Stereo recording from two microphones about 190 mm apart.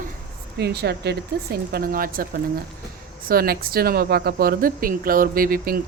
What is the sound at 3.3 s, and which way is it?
Speech, 50° right (ahead or behind).